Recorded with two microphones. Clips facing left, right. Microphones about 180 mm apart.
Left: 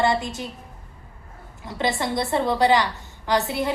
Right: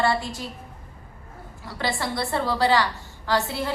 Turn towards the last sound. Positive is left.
turn(degrees=20)  # may be behind; listen again after turning